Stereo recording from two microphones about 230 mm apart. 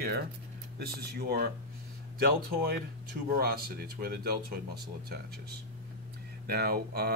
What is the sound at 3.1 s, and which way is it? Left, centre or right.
Speech, right.